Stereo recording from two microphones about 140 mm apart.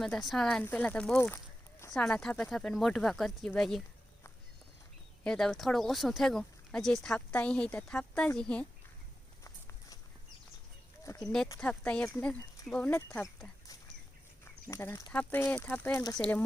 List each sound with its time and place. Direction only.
0.0 s speech: centre (ahead or behind)
5.2 s speech: 5° left (ahead or behind)
9.4 s walk: 25° left (ahead or behind)
11.2 s speech: 5° left (ahead or behind)
14.7 s speech: 20° left (ahead or behind)